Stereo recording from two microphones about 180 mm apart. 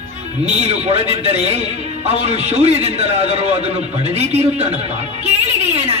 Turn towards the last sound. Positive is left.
turn(degrees=-35)  # may be behind; listen again after turning